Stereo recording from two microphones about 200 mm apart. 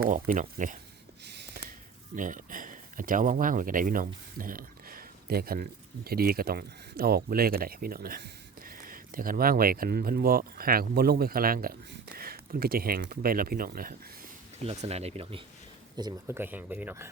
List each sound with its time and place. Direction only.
0.1 s speech: 40° right (ahead or behind)
2.1 s speech: 40° right (ahead or behind)
14.6 s speech: 30° right (ahead or behind)
16.0 s speech: 15° right (ahead or behind)